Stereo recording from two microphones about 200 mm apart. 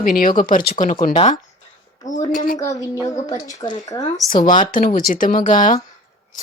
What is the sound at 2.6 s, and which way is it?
A woman's voice, 15° left (ahead or behind).